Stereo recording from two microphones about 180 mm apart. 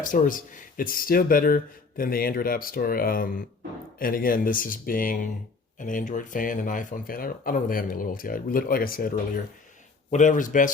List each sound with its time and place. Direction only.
0.0 s speech: 50° left (ahead or behind)